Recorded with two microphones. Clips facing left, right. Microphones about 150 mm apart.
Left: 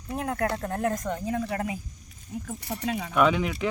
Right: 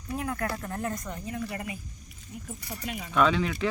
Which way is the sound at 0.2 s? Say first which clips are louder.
Left 5 dB; 60° left (ahead or behind).